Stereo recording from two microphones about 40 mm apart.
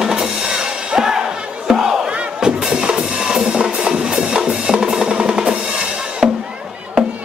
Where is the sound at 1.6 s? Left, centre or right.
Centre.